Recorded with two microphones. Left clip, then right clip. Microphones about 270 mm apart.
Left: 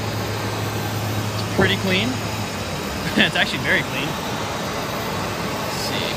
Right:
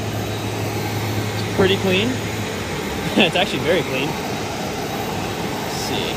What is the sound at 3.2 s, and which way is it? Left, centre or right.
Speech, centre.